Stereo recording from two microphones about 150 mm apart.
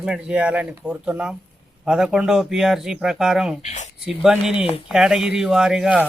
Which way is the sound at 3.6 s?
50° left (ahead or behind).